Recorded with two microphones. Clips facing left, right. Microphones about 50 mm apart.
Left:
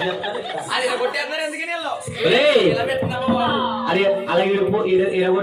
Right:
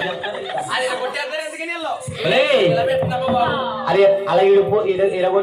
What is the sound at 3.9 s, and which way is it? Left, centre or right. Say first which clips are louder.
Speech: right 5 dB; right.